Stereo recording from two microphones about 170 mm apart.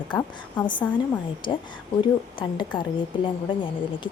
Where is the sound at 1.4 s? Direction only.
25° left (ahead or behind).